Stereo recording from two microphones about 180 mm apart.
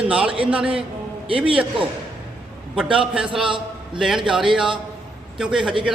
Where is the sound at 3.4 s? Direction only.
25° right (ahead or behind).